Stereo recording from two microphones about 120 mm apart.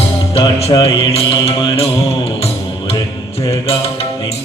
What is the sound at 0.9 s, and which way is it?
Mantra, 50° left (ahead or behind).